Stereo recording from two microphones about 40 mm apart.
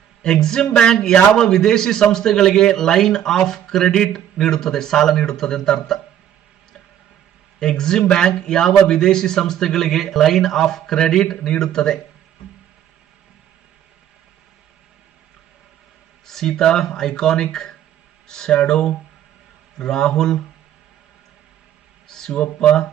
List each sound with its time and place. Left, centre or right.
0.2 s a man's voice: centre
7.6 s a man's voice: centre
16.2 s a man's voice: centre
22.0 s a sound: centre
22.6 s speech: left